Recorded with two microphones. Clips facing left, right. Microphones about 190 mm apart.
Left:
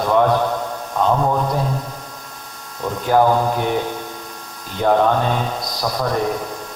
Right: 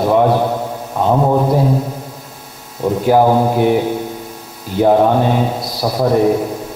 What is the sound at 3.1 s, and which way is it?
Speech, 40° right (ahead or behind).